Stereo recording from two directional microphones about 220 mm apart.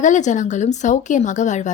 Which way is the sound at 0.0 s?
35° left (ahead or behind).